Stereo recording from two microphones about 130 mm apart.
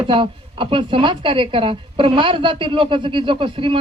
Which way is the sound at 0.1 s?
40° right (ahead or behind).